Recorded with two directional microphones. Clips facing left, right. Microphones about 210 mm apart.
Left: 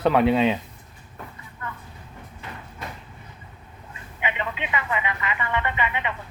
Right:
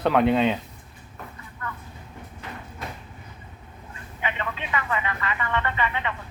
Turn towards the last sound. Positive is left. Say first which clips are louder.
# even
turn(degrees=15)  # may be behind; listen again after turning